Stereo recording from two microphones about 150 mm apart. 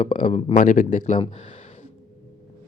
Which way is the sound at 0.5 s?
65° left (ahead or behind).